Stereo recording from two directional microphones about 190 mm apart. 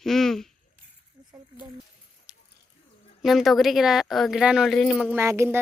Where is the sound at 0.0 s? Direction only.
Centre (ahead or behind).